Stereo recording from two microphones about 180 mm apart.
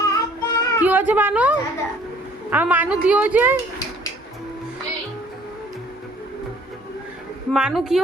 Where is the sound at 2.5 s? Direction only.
10° right (ahead or behind).